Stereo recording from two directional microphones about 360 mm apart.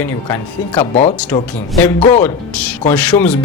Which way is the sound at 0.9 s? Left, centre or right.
Centre.